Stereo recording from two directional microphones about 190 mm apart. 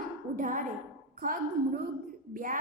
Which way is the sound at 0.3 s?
40° right (ahead or behind).